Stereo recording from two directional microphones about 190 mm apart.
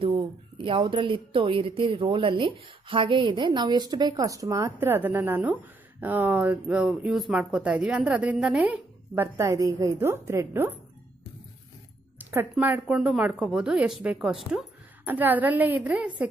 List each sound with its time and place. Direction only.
0.0 s a woman's voice: 30° right (ahead or behind); by 10.8 s 10° right (ahead or behind)
12.2 s a woman's voice: 10° right (ahead or behind)